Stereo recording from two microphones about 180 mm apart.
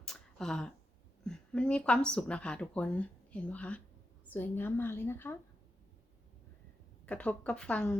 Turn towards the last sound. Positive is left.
turn(degrees=5)  # may be behind; listen again after turning